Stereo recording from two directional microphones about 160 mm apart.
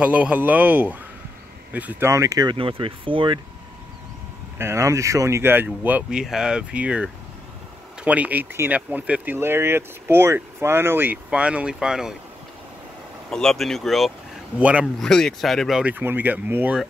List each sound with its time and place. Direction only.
0.0 s speech: 10° right (ahead or behind)
2.5 s speech: 35° right (ahead or behind)
4.6 s speech: 15° right (ahead or behind)
13.3 s speech: 5° left (ahead or behind)
15.0 s speech: 5° left (ahead or behind)